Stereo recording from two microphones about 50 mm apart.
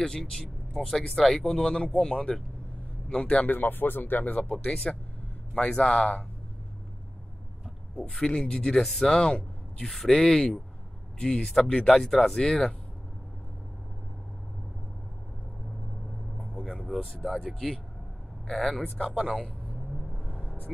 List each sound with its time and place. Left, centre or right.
0.0 s a man's voice: centre
3.4 s speech: left; by 6.0 s centre
8.0 s speech: centre
8.8 s speech: centre
9.1 s speech: centre
16.9 s speech: centre
18.5 s speech: centre
19.0 s speech: right
20.2 s vehicle: left